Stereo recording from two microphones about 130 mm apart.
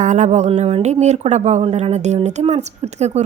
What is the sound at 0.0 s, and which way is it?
Speech, 70° right (ahead or behind).